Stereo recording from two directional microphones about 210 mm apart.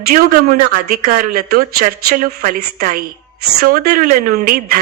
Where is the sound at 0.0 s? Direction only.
40° right (ahead or behind).